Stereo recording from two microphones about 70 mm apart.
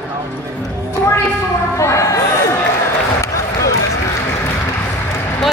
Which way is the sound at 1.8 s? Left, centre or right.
Left.